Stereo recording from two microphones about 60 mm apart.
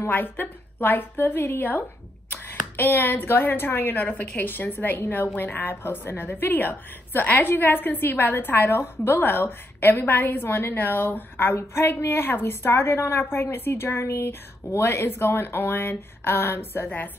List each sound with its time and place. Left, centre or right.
0.0 s a woman's voice: left